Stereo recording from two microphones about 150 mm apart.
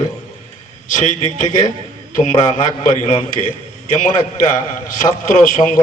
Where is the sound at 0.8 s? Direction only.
60° left (ahead or behind).